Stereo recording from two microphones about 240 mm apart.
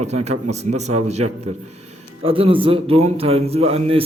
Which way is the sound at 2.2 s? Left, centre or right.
Right.